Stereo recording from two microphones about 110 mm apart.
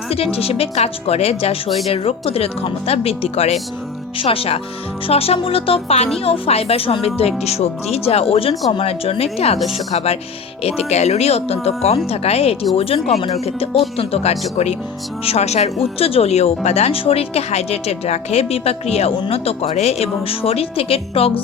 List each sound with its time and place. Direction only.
0.1 s speech: 65° left (ahead or behind)
4.2 s speech: 60° left (ahead or behind)
13.3 s speech: 70° left (ahead or behind)